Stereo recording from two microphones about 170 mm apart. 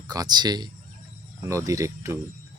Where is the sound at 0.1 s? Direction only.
25° right (ahead or behind).